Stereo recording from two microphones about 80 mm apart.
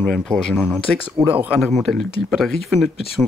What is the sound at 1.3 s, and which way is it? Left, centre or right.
Speech, right.